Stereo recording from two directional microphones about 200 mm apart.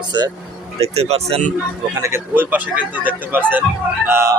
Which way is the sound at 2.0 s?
10° right (ahead or behind).